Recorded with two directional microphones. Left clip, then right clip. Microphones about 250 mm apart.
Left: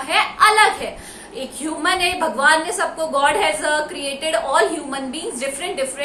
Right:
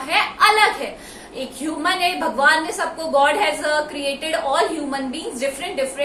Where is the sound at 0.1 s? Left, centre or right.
Centre.